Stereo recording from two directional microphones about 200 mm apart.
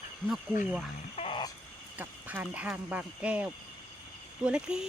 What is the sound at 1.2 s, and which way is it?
Music, 25° left (ahead or behind).